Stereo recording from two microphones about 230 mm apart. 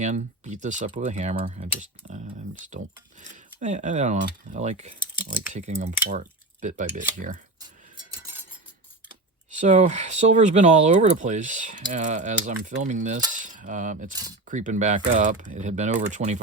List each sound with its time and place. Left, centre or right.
0.0 s speech: right
2.6 s speech: right
6.1 s cutlery: right
7.9 s cutlery: centre
9.6 s speech: right
13.3 s cutlery: right
14.4 s speech: right